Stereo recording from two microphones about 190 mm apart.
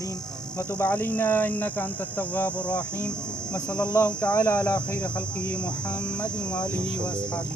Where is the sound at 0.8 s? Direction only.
10° left (ahead or behind).